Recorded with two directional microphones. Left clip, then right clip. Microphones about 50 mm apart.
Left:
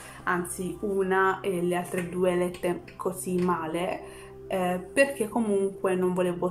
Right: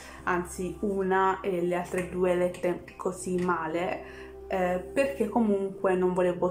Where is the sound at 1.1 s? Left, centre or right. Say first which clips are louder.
Even; centre.